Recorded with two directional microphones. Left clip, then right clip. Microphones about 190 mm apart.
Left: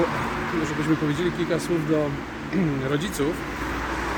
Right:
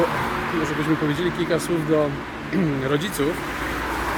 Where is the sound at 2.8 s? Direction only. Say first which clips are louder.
Right 3 dB; 15° right (ahead or behind).